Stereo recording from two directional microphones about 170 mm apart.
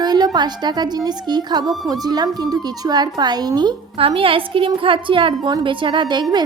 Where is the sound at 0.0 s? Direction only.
25° right (ahead or behind).